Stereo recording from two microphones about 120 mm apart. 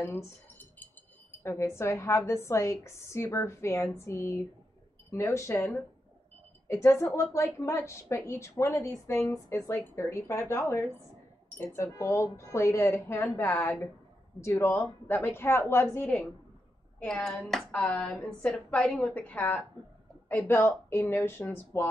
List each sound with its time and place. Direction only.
0.0 s a sound: 20° left (ahead or behind)
1.4 s a woman's voice: 20° left (ahead or behind)
6.7 s a woman's voice: 20° left (ahead or behind)
17.0 s a woman's voice: 5° left (ahead or behind)